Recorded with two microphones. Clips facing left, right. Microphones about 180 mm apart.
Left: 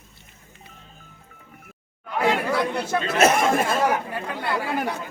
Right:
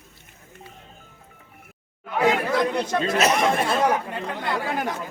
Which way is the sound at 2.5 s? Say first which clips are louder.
Right 1 dB; 10° left (ahead or behind).